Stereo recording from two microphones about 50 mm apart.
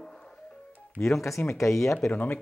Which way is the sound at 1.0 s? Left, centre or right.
Left.